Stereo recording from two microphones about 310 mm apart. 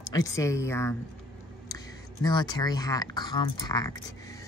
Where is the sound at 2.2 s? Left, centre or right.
Centre.